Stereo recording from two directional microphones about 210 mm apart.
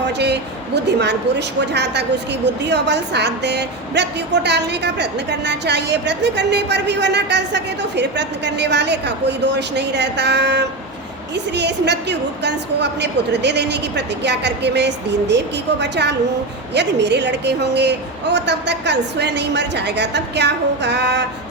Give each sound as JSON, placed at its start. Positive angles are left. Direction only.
{"t": 0.9, "sound": "a woman's voice", "side_deg": -55}